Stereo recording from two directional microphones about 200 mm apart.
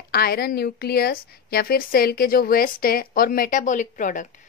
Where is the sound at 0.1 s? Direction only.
50° left (ahead or behind).